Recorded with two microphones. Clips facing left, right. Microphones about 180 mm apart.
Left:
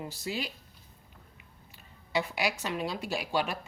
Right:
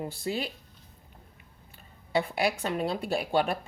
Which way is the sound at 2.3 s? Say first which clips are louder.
Right 4 dB; 55° right (ahead or behind).